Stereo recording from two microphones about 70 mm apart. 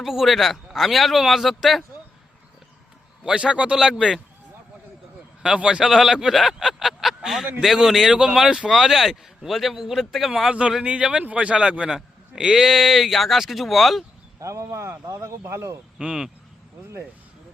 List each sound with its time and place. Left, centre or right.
0.0 s speech: centre
3.2 s speech: centre
5.4 s a man's voice: centre
5.8 s speech: centre
10.5 s speech: centre
14.3 s speech: right
16.0 s speech: centre